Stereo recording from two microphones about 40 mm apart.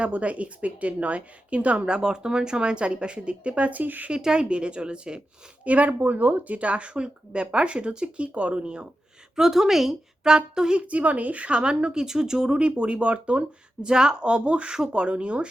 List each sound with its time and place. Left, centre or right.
0.0 s a woman's voice: right
1.9 s a woman's voice: centre; by 4.1 s right
4.1 s a woman's voice: centre
5.6 s a woman's voice: right
9.3 s a woman's voice: centre
10.8 s a woman's voice: right
13.8 s a woman's voice: centre